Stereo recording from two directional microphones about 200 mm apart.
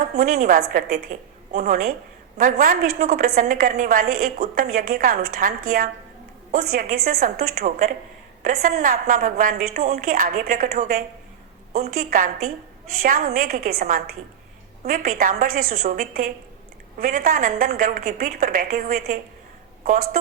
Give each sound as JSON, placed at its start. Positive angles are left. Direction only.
{"t": 0.1, "sound": "a woman's voice", "side_deg": -40}